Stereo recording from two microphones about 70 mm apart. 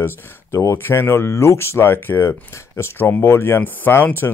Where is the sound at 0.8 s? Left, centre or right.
Left.